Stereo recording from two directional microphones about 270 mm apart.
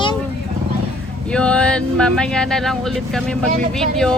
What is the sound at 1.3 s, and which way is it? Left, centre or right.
Speech, centre.